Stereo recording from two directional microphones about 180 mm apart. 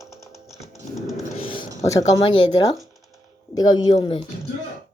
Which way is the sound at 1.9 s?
20° left (ahead or behind).